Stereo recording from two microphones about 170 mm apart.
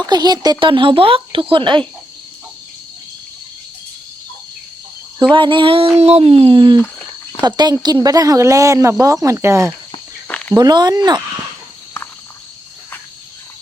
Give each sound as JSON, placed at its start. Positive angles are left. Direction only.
{"t": 0.0, "sound": "speech", "side_deg": -25}
{"t": 5.3, "sound": "speech", "side_deg": -30}
{"t": 10.2, "sound": "a sound", "side_deg": 10}
{"t": 10.5, "sound": "speech", "side_deg": -25}